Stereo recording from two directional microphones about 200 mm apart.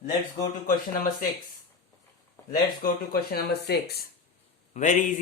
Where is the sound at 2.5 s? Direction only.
50° left (ahead or behind).